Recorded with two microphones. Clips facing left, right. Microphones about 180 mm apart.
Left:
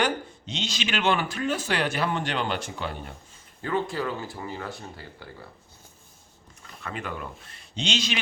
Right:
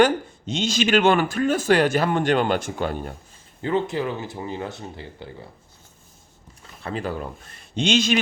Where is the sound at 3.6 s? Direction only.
20° right (ahead or behind).